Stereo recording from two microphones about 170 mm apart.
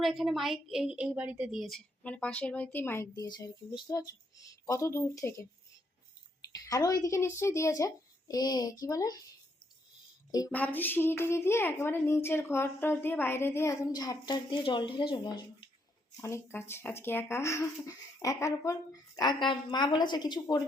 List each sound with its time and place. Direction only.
0.0 s a woman's voice: centre (ahead or behind)
3.1 s a child's voice: 25° left (ahead or behind)
6.5 s a woman's voice: 20° left (ahead or behind)
10.5 s a child's voice: 10° left (ahead or behind); by 15.3 s 30° left (ahead or behind)
16.2 s speech: 15° left (ahead or behind)